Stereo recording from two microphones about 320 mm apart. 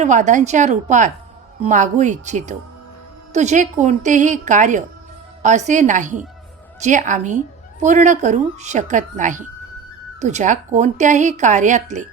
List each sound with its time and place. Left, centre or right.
0.0 s a woman's voice: right